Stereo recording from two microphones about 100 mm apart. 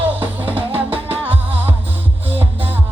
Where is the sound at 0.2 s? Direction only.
20° right (ahead or behind).